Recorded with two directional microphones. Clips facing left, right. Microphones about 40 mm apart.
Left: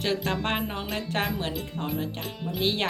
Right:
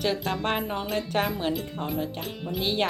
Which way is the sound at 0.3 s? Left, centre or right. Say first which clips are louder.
Right 1 dB; centre.